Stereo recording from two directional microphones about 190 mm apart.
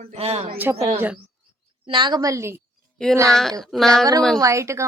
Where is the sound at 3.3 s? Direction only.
5° left (ahead or behind).